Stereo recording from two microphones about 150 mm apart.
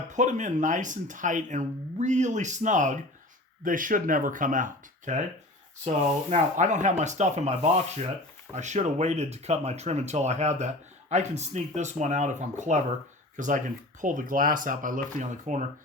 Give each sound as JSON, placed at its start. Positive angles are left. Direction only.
{"t": 0.1, "sound": "speech", "side_deg": -55}
{"t": 6.3, "sound": "speech", "side_deg": -55}